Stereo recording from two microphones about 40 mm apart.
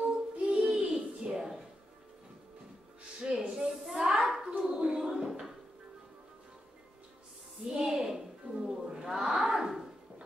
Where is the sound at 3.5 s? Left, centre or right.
Centre.